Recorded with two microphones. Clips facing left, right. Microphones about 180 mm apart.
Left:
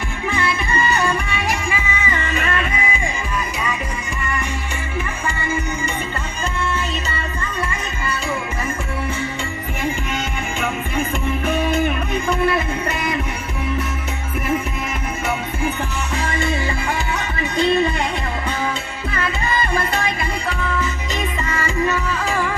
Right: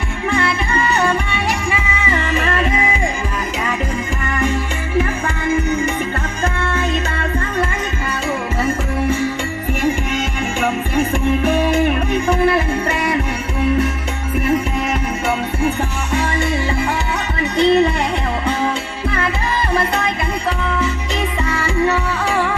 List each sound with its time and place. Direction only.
6.4 s music: 55° right (ahead or behind)
10.9 s music: 70° right (ahead or behind)
12.9 s music: 70° right (ahead or behind)
17.6 s music: 25° right (ahead or behind)